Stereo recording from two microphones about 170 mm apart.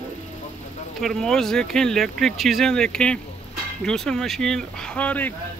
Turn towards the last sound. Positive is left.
turn(degrees=10)  # may be behind; listen again after turning